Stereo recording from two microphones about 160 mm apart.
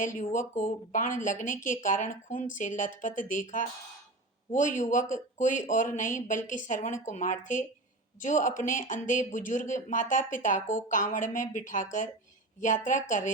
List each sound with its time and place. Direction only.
0.0 s speech: 50° left (ahead or behind)